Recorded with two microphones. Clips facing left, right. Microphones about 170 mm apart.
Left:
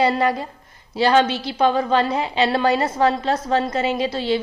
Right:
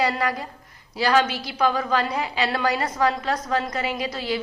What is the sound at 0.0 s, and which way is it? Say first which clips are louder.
A woman's voice: left 5 dB; 25° left (ahead or behind).